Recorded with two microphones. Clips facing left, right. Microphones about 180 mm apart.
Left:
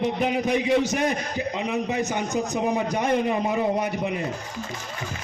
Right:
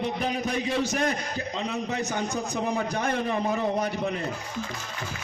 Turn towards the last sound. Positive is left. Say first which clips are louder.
# left 2 dB
turn(degrees=15)  # may be behind; listen again after turning